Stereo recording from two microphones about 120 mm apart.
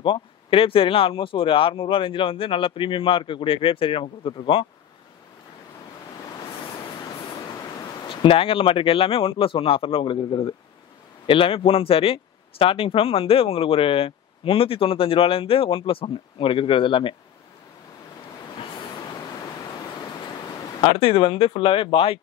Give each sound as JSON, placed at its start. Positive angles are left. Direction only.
{"t": 0.0, "sound": "speech", "side_deg": 45}
{"t": 8.1, "sound": "speech", "side_deg": 45}
{"t": 21.0, "sound": "speech", "side_deg": 50}